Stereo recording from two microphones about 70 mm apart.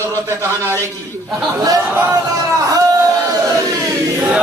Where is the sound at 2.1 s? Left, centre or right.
Right.